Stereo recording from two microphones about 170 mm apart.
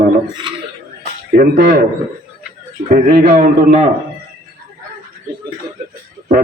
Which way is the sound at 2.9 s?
60° right (ahead or behind).